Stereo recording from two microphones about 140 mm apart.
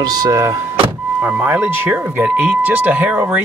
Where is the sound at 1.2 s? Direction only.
15° right (ahead or behind).